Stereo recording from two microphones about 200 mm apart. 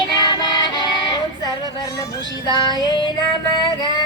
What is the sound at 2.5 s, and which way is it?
Music, 20° left (ahead or behind).